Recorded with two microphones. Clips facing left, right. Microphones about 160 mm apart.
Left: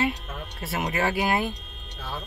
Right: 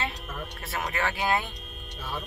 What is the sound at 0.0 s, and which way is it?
Music, 25° left (ahead or behind).